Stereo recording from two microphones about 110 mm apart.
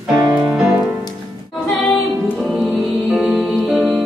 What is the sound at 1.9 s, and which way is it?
Music, centre (ahead or behind).